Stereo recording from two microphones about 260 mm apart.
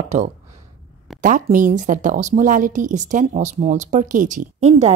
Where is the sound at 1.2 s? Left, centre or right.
Right.